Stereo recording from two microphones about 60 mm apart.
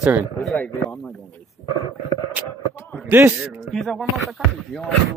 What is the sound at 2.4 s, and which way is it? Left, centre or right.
Speech, right.